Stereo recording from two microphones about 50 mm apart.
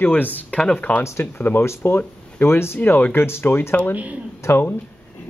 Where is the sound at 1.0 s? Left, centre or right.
Left.